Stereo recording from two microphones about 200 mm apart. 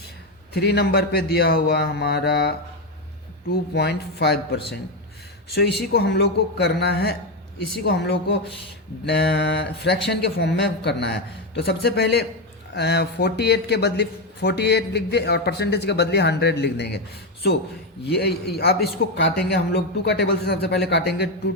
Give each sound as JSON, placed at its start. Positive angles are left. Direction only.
{"t": 0.5, "sound": "a man's voice", "side_deg": 55}
{"t": 18.1, "sound": "a man's voice", "side_deg": 55}